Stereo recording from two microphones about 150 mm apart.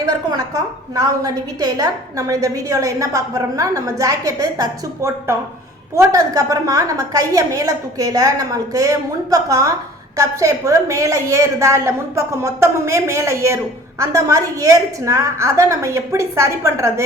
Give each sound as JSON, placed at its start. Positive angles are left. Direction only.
{"t": 0.0, "sound": "a woman's voice", "side_deg": -25}